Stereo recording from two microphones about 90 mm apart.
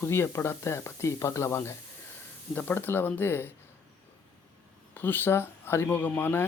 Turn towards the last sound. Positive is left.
turn(degrees=25)  # may be behind; listen again after turning